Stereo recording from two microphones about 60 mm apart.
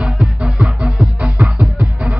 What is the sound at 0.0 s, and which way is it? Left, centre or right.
Music, centre.